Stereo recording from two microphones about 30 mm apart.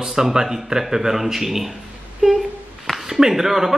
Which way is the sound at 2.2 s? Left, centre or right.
Right.